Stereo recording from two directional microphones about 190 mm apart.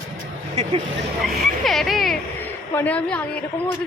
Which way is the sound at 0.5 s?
35° right (ahead or behind).